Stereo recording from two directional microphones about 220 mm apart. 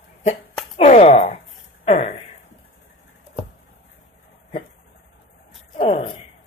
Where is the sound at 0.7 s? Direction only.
30° left (ahead or behind).